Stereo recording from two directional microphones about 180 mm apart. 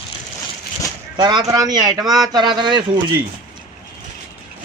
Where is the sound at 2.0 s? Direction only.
Centre (ahead or behind).